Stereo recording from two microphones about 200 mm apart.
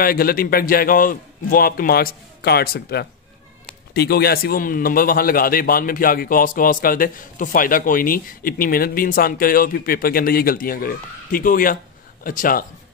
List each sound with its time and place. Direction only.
0.0 s a man's voice: 45° left (ahead or behind)